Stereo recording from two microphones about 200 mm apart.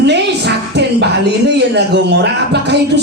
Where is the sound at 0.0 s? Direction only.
55° right (ahead or behind).